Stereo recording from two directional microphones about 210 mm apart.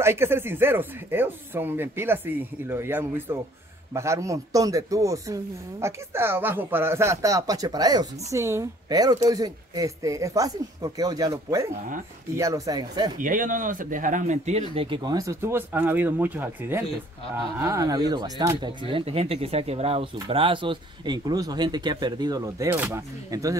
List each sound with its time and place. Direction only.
0.0 s speech: 10° right (ahead or behind)
13.2 s speech: 40° right (ahead or behind)
14.8 s speech: 20° right (ahead or behind)